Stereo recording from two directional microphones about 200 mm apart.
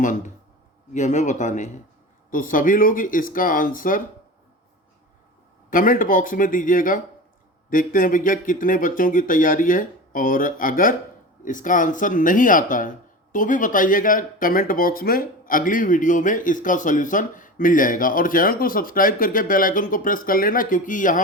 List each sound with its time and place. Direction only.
0.9 s speech: 35° left (ahead or behind)
5.7 s speech: 45° left (ahead or behind)